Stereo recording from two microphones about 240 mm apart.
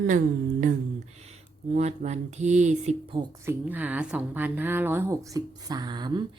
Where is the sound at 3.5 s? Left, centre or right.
Centre.